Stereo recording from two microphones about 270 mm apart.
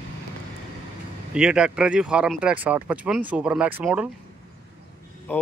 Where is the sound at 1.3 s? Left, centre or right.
Centre.